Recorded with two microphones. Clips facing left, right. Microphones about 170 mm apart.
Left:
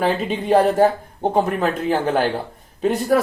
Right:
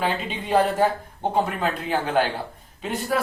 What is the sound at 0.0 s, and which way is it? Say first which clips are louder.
Speech: left 6 dB; 40° left (ahead or behind).